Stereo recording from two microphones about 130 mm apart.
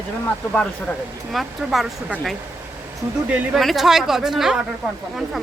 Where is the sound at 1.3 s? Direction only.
Centre (ahead or behind).